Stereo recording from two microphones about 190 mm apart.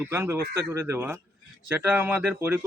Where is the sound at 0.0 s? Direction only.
10° right (ahead or behind).